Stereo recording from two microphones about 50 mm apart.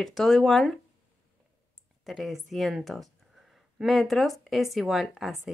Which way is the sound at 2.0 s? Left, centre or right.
Centre.